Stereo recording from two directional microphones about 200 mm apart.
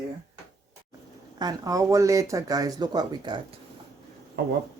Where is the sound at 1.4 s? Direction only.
20° right (ahead or behind).